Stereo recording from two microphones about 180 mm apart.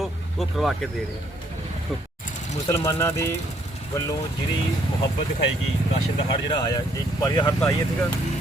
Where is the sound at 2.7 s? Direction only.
15° left (ahead or behind).